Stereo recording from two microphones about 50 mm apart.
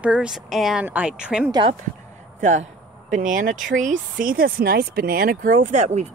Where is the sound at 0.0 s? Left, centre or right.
Right.